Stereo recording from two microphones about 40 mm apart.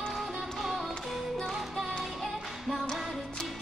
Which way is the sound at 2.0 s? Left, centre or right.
Centre.